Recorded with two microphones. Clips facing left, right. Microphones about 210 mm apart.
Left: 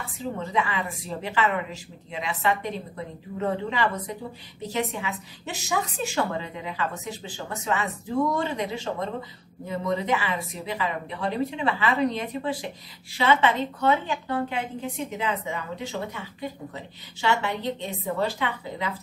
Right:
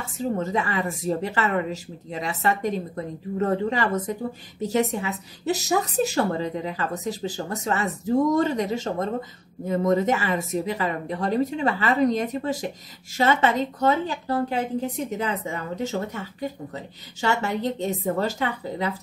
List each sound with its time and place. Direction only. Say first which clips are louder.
0.0 s a woman's voice: right 6 dB; 45° right (ahead or behind)